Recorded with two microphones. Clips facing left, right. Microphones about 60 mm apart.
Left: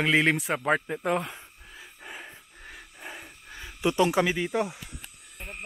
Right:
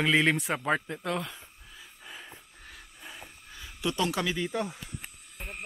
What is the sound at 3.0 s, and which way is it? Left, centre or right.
Wild animals, left.